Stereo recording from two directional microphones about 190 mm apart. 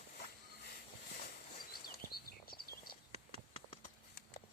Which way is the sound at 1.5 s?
50° left (ahead or behind).